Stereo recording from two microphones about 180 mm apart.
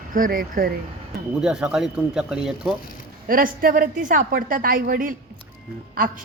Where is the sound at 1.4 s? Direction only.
5° right (ahead or behind).